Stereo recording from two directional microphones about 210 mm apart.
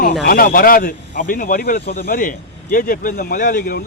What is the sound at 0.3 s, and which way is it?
Speech, 45° left (ahead or behind).